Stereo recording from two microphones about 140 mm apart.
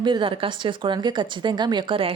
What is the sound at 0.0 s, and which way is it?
A woman's voice, 35° right (ahead or behind).